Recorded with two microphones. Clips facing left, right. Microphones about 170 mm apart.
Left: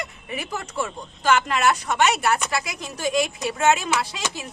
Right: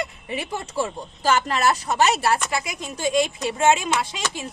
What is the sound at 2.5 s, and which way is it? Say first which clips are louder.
A woman's voice: even; 25° right (ahead or behind).